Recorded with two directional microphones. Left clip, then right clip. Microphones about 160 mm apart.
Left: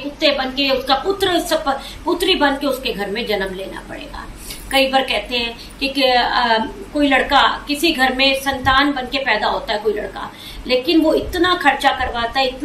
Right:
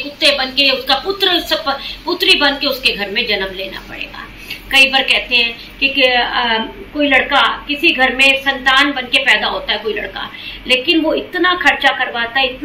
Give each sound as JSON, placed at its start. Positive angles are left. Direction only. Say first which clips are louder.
{"t": 0.2, "sound": "a woman's voice", "louder": "right 4 dB", "side_deg": 15}
{"t": 4.6, "sound": "a woman's voice", "louder": "right 5 dB", "side_deg": 20}